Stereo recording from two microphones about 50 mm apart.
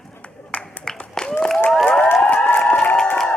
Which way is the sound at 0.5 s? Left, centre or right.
Left.